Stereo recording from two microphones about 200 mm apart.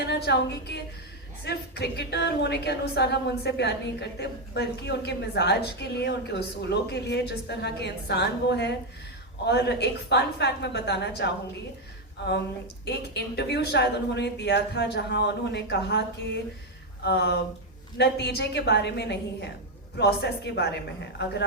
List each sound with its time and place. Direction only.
0.0 s a woman's voice: 55° left (ahead or behind)
12.8 s a woman's voice: 55° left (ahead or behind)